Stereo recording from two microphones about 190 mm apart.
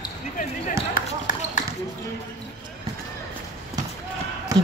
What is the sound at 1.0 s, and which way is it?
Basketball bounce, 45° left (ahead or behind).